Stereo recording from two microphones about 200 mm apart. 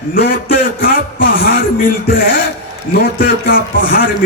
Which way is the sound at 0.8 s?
45° left (ahead or behind).